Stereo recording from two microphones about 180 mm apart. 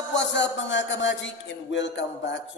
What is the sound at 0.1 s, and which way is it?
A man's voice, 85° left.